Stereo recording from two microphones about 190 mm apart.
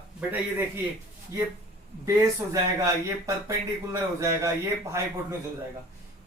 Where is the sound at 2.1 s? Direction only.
15° right (ahead or behind).